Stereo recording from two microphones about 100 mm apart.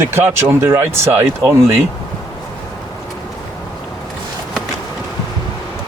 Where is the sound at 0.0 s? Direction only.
25° right (ahead or behind).